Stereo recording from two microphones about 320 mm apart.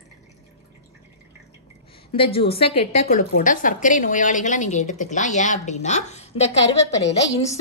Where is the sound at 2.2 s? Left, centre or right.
Centre.